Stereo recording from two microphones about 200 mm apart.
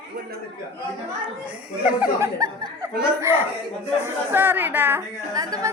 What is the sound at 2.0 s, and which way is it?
Speech, 15° right (ahead or behind).